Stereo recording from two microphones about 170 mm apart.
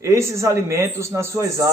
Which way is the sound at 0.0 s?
15° right (ahead or behind).